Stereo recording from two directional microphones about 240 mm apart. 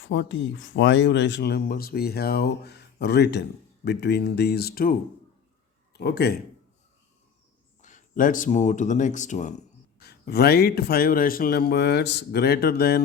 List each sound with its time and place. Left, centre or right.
0.0 s speech: left
7.8 s speech: left
10.0 s speech: left